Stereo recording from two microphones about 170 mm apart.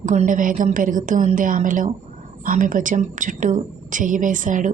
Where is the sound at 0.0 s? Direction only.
45° right (ahead or behind).